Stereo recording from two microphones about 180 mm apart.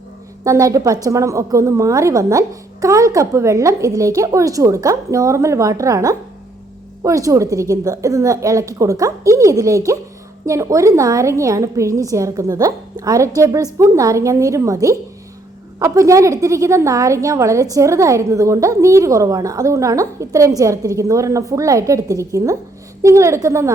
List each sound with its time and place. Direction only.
0.4 s a woman's voice: 15° right (ahead or behind)